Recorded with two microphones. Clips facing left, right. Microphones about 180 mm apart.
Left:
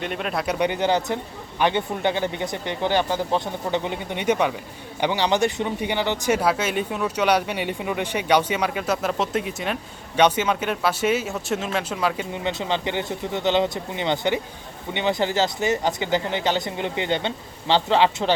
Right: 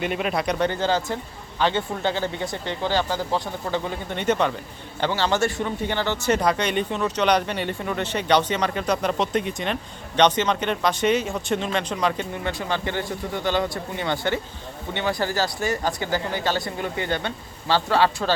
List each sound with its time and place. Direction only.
0.0 s speech: 5° right (ahead or behind)
0.6 s speech: 15° left (ahead or behind)
12.3 s speech: 20° left (ahead or behind)